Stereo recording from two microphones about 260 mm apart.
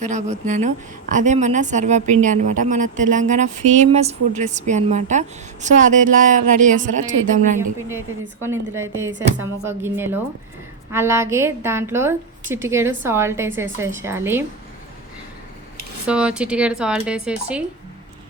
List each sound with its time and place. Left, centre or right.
0.0 s a woman's voice: right
8.4 s a woman's voice: centre
16.0 s speech: centre